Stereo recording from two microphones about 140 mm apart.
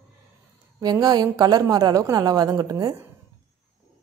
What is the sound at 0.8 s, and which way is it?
Speech, 30° right (ahead or behind).